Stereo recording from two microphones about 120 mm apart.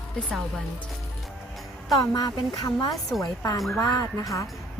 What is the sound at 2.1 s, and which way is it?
Speech, 35° left (ahead or behind).